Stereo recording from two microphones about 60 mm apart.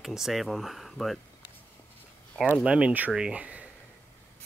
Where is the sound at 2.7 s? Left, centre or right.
Centre.